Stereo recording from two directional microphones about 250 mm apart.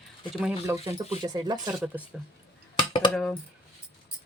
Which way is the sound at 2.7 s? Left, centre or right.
Centre.